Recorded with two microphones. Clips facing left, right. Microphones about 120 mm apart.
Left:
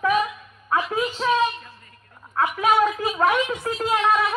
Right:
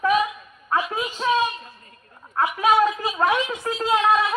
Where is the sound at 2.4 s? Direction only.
5° right (ahead or behind).